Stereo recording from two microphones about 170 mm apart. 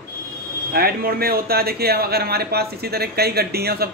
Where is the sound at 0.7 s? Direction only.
60° right (ahead or behind).